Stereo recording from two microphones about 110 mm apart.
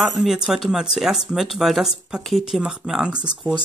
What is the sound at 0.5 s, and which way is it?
Speech, 5° right (ahead or behind).